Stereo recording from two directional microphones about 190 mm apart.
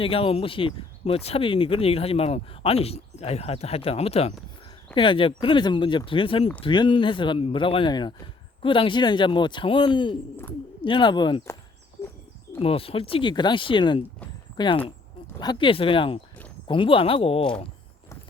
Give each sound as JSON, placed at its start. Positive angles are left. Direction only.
{"t": 0.0, "sound": "speech", "side_deg": 30}
{"t": 12.5, "sound": "speech", "side_deg": 30}